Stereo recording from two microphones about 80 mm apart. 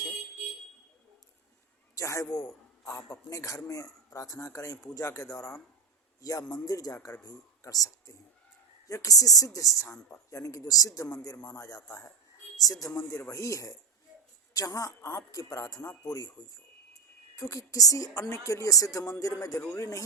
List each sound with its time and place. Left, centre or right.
2.0 s a man's voice: left
12.5 s speech: left
13.0 s speech: left